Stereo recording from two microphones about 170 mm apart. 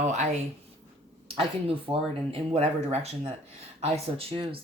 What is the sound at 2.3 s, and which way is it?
Speech, 35° right (ahead or behind).